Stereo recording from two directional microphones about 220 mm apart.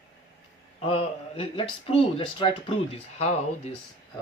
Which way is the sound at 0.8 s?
25° left (ahead or behind).